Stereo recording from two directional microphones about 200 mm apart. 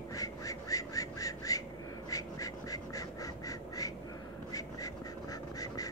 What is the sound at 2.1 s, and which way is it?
Duck, 15° left (ahead or behind).